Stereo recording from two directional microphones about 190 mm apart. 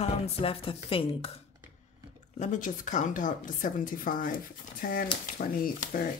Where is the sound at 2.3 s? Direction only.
40° left (ahead or behind).